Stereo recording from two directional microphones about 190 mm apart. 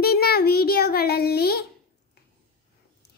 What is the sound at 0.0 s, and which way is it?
Child singing, 55° left (ahead or behind).